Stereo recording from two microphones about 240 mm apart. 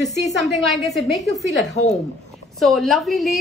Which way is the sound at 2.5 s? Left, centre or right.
Centre.